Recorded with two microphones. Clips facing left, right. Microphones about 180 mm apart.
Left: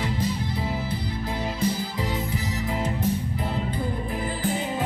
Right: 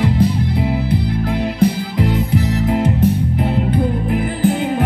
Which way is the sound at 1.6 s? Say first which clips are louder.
Right 11 dB; 65° right (ahead or behind).